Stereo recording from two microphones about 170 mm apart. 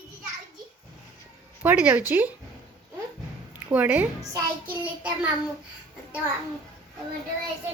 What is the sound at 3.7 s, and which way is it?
A child's voice, 10° right (ahead or behind).